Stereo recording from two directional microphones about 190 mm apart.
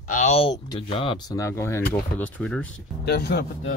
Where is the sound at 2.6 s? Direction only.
60° left (ahead or behind).